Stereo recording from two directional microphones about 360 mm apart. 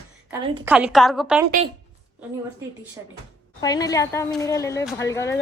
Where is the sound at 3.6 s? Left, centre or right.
Centre.